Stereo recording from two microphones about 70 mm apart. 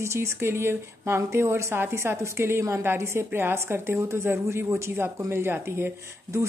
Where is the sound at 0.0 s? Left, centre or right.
Right.